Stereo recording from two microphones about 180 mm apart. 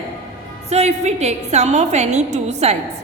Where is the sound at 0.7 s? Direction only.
35° right (ahead or behind).